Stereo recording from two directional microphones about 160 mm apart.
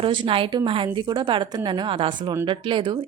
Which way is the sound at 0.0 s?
30° right (ahead or behind).